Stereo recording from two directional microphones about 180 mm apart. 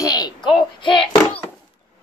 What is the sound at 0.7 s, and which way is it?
Child singing, 25° left (ahead or behind).